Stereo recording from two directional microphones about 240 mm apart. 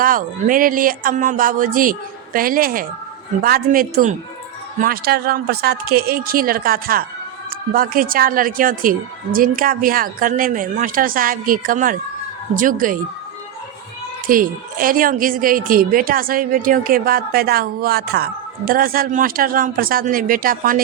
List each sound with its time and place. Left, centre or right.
0.0 s speech: right
14.3 s speech: right